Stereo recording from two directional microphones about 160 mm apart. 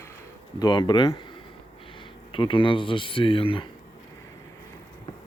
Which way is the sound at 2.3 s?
30° left (ahead or behind).